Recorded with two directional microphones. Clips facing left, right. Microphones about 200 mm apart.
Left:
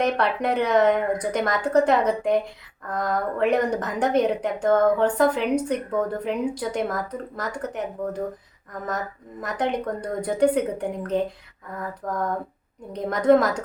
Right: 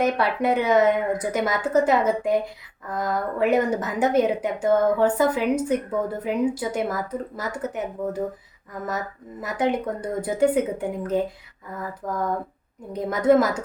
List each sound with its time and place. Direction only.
0.0 s a woman's voice: 5° right (ahead or behind)
9.4 s a woman's voice: 5° right (ahead or behind)